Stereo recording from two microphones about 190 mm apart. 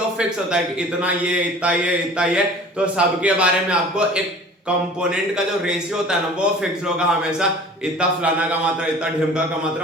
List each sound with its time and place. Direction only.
0.2 s a man's voice: 5° right (ahead or behind)
5.6 s a man's voice: 5° right (ahead or behind)